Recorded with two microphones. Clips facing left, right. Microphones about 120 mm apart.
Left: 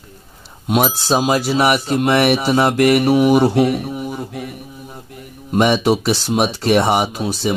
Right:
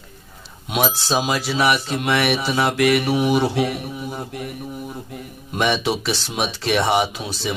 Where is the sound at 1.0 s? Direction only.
40° left (ahead or behind).